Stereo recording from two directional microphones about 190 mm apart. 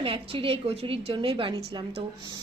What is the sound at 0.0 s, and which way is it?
A woman's voice, 30° right (ahead or behind).